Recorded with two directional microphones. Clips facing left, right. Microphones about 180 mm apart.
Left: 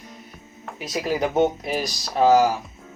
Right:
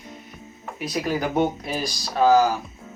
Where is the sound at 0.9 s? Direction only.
20° left (ahead or behind).